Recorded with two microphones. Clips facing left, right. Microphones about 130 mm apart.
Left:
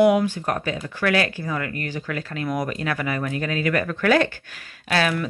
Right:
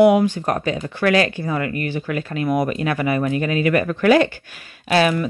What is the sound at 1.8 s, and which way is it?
Speech, 15° right (ahead or behind).